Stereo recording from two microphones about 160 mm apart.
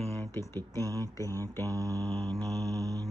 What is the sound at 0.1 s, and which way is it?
Speech, 15° left (ahead or behind).